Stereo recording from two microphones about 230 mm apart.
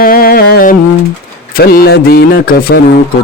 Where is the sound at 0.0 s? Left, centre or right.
Left.